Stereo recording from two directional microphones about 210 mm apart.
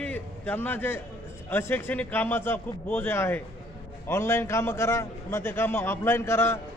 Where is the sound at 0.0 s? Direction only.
10° left (ahead or behind).